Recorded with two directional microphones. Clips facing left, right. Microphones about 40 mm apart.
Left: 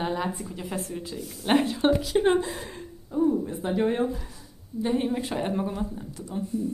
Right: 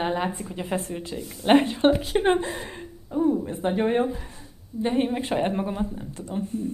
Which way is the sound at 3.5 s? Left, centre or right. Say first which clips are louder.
Right 2 dB; right.